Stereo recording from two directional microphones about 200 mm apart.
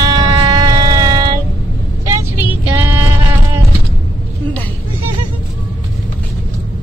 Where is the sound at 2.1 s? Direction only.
15° right (ahead or behind).